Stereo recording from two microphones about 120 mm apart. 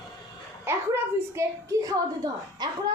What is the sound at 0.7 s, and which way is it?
A woman's voice, 20° right (ahead or behind).